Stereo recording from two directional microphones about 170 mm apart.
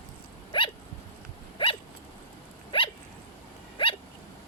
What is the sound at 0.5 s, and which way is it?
Dog, 30° left (ahead or behind).